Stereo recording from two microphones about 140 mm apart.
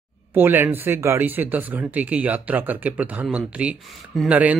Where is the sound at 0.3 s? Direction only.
15° right (ahead or behind).